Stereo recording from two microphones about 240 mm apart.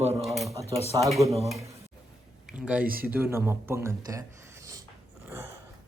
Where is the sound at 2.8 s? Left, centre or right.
Right.